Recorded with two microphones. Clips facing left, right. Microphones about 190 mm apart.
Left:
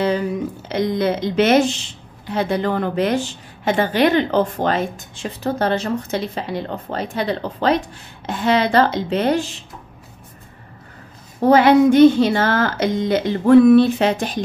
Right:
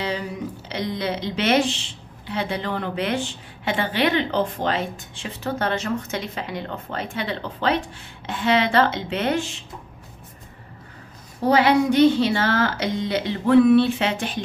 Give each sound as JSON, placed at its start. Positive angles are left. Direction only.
{"t": 0.0, "sound": "a woman's voice", "side_deg": 50}
{"t": 11.3, "sound": "speech", "side_deg": 50}